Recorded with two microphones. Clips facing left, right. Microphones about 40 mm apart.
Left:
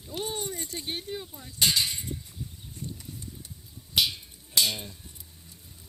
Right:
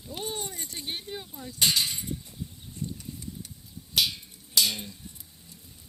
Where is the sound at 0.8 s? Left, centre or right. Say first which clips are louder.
Even; centre.